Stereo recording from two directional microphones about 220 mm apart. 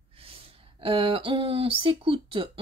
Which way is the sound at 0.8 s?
25° right (ahead or behind).